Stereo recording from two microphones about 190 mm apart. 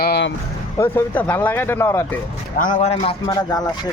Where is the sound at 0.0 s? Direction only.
60° left (ahead or behind).